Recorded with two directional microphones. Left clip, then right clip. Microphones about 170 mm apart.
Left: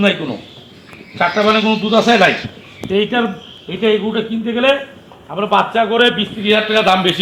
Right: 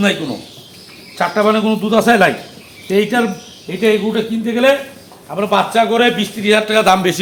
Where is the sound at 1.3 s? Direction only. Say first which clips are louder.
Even; centre (ahead or behind).